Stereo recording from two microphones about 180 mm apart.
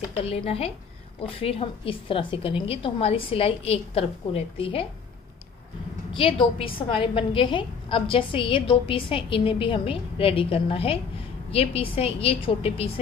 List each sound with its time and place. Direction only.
0.1 s a woman's voice: 35° left (ahead or behind)
6.1 s a woman's voice: 30° left (ahead or behind)